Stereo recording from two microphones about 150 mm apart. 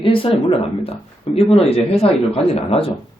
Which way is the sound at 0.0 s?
35° left (ahead or behind).